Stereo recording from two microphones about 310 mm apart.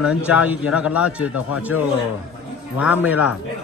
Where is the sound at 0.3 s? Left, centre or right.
Centre.